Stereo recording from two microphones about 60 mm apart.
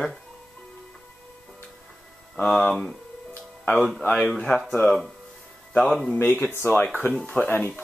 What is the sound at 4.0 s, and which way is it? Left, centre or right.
Speech, left.